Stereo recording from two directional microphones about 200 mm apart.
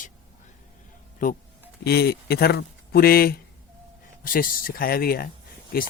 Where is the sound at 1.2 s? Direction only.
40° left (ahead or behind).